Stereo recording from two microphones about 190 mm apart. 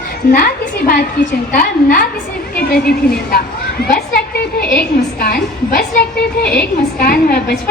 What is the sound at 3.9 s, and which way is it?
A woman's voice, 55° left (ahead or behind).